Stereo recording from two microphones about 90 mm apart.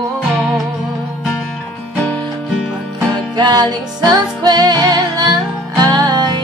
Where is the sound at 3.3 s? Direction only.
50° right (ahead or behind).